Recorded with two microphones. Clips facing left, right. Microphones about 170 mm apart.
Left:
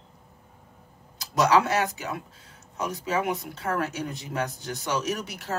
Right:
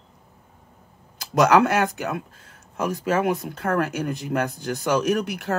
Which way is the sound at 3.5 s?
55° right (ahead or behind).